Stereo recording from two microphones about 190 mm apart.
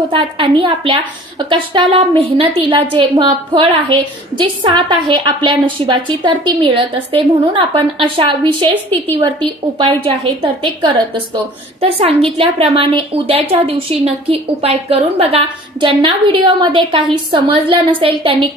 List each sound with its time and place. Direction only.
0.1 s a woman's voice: 30° right (ahead or behind)